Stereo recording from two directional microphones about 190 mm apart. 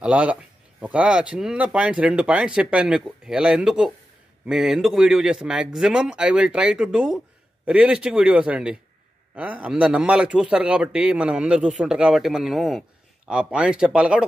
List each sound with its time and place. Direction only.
0.0 s speech: 5° right (ahead or behind)